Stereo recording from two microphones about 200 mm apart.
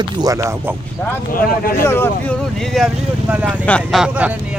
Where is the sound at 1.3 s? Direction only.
45° left (ahead or behind).